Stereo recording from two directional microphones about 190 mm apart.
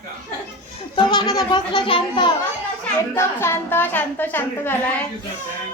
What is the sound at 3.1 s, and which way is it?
A woman's voice, 15° left (ahead or behind).